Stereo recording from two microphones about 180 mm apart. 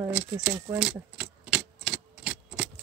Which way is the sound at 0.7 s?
5° right (ahead or behind).